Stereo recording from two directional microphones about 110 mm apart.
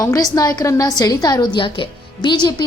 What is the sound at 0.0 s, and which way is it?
A woman's voice, 35° left (ahead or behind).